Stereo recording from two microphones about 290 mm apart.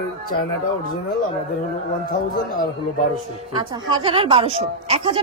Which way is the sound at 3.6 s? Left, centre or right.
Centre.